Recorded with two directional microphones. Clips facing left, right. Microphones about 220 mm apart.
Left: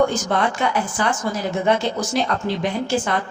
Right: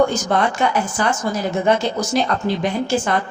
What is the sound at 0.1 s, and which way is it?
A woman's voice, 40° right (ahead or behind).